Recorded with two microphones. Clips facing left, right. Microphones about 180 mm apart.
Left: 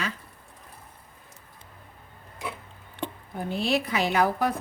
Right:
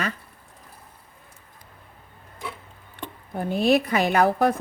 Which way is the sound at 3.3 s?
50° right (ahead or behind).